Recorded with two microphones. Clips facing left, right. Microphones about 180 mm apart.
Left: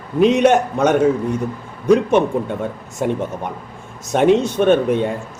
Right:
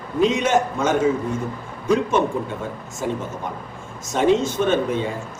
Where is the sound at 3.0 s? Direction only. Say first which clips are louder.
Left 5 dB; 60° left (ahead or behind).